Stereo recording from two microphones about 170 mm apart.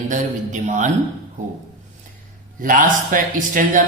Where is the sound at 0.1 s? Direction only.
45° right (ahead or behind).